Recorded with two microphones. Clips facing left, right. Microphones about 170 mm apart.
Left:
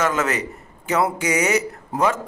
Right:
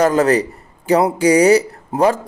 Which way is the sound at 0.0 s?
35° right (ahead or behind).